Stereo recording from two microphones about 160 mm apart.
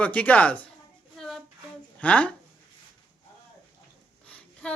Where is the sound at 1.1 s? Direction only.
Centre (ahead or behind).